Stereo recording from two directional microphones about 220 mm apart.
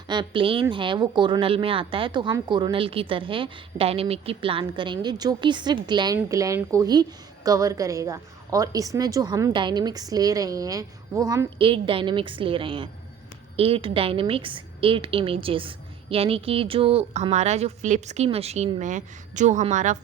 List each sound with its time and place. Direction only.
0.1 s a woman's voice: 20° right (ahead or behind)